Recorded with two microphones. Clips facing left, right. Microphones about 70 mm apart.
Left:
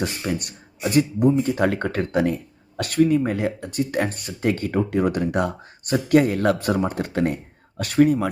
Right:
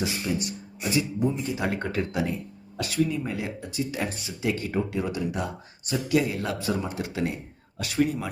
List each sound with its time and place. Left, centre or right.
0.0 s speech: left